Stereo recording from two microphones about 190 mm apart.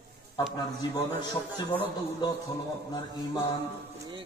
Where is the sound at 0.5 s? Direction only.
20° left (ahead or behind).